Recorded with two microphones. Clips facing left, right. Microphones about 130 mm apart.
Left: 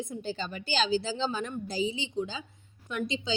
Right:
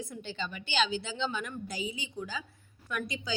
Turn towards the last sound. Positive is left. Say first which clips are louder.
# left 4 dB
turn(degrees=25)  # may be behind; listen again after turning